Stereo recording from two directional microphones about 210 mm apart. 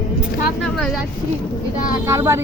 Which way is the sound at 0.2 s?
Centre (ahead or behind).